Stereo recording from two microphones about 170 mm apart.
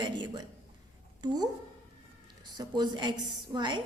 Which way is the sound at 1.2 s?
25° right (ahead or behind).